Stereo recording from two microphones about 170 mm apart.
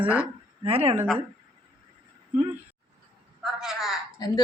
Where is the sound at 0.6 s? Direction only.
35° right (ahead or behind).